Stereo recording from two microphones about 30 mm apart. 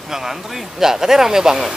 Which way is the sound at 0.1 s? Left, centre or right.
Centre.